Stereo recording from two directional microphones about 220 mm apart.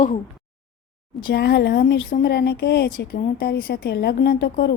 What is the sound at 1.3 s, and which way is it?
A woman's voice, 50° left (ahead or behind).